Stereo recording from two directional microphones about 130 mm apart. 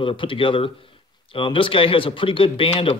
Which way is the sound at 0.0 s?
40° left (ahead or behind).